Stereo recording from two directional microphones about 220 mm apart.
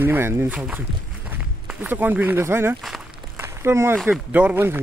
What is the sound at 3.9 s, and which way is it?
Speech, centre (ahead or behind).